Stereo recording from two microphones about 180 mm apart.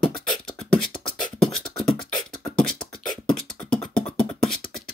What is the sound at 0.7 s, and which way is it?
Beatboxing, 5° left (ahead or behind).